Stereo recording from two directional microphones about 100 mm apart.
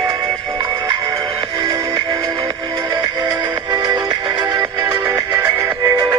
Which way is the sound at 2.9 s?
45° right (ahead or behind).